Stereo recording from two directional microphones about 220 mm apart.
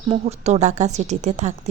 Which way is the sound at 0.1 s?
30° right (ahead or behind).